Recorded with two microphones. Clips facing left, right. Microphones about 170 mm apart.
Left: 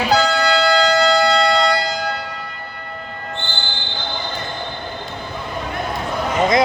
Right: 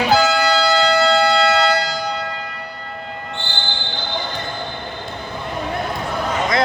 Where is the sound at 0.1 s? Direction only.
5° right (ahead or behind).